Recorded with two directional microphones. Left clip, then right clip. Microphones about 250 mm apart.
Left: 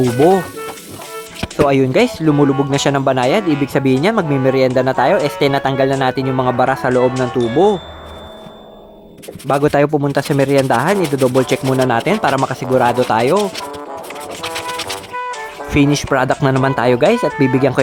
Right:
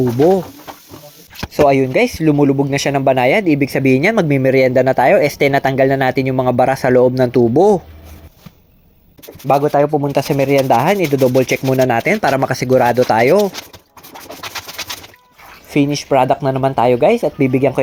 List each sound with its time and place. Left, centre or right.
0.2 s speech: centre
1.6 s speech: centre
9.6 s speech: centre
10.1 s speech: centre
16.0 s speech: centre